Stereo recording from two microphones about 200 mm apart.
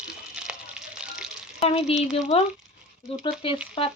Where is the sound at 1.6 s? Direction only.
30° left (ahead or behind).